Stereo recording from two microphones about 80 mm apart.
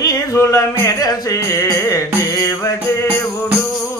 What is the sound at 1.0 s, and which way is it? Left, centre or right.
Music, left.